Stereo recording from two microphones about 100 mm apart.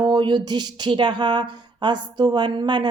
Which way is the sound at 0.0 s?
45° right (ahead or behind).